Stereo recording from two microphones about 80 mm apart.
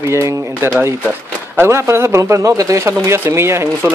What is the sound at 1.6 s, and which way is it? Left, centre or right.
Speech, right.